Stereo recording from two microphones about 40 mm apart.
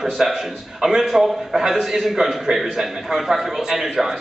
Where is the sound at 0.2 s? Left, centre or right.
Centre.